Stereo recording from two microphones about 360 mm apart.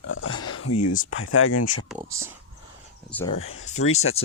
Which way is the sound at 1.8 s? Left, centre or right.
Centre.